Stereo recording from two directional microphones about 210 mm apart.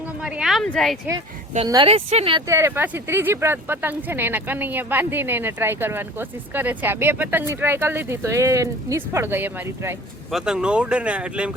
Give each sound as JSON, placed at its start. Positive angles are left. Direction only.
{"t": 0.2, "sound": "a sound", "side_deg": -5}
{"t": 1.5, "sound": "speech", "side_deg": -20}
{"t": 2.5, "sound": "speech", "side_deg": -10}